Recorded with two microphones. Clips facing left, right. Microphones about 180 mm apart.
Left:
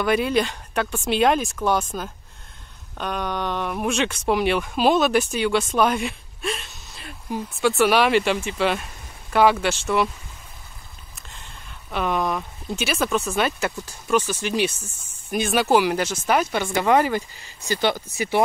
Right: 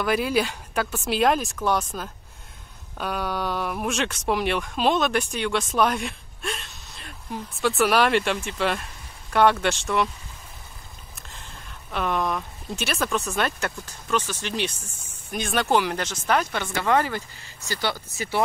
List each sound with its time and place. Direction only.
0.0 s speech: centre (ahead or behind)
11.1 s speech: centre (ahead or behind); by 18.4 s 15° left (ahead or behind)